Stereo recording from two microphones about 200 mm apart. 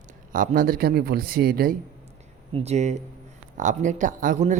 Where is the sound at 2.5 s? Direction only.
30° right (ahead or behind).